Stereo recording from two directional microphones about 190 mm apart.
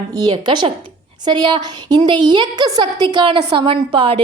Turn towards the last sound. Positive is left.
turn(degrees=-25)  # may be behind; listen again after turning